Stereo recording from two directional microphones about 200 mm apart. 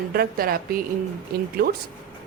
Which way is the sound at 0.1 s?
50° right (ahead or behind).